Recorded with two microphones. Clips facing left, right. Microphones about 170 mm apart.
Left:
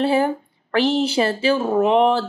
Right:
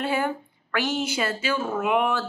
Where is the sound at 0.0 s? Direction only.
30° left (ahead or behind).